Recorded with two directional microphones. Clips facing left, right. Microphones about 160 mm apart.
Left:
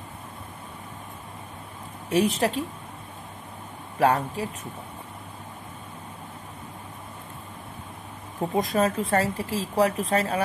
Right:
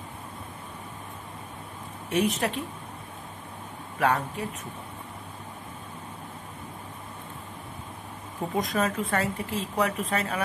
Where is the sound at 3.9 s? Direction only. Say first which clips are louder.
Left 4 dB; 35° left (ahead or behind).